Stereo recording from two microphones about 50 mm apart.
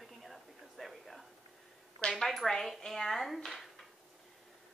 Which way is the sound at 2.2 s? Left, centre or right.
Centre.